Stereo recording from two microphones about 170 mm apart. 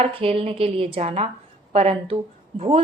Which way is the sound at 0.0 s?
35° right (ahead or behind).